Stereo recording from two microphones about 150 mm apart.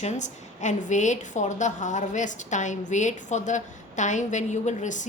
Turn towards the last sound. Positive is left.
turn(degrees=55)  # may be behind; listen again after turning